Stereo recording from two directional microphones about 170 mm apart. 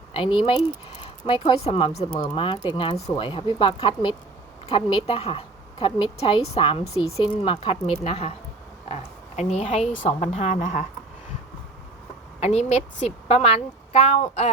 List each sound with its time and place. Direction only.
0.1 s speech: 30° left (ahead or behind)
1.0 s a sound: 25° left (ahead or behind)
1.6 s a woman's voice: 35° left (ahead or behind)
12.4 s a woman's voice: 40° left (ahead or behind)